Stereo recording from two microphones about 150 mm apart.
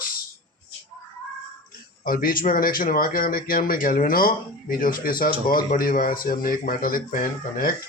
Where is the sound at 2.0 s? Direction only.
75° left (ahead or behind).